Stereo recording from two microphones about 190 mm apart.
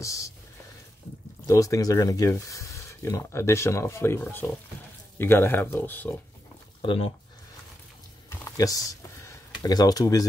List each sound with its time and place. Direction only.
0.0 s speech: 15° left (ahead or behind)
1.4 s speech: 15° left (ahead or behind)
6.8 s speech: 30° left (ahead or behind)
8.3 s a sound: 15° left (ahead or behind)